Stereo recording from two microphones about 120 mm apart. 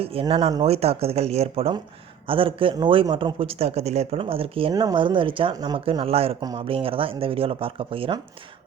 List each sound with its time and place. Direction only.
0.0 s speech: 55° right (ahead or behind)
4.7 s speech: 30° right (ahead or behind)
4.9 s speech: 45° right (ahead or behind)
5.8 s speech: 50° right (ahead or behind)